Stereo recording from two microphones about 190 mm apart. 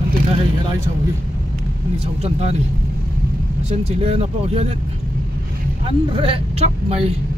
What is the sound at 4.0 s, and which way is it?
Speech, 35° right (ahead or behind).